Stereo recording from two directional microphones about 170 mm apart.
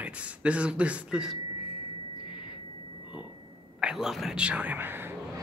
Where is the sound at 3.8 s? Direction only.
Centre (ahead or behind).